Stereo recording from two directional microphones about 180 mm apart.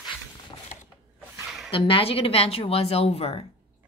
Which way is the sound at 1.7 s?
30° left (ahead or behind).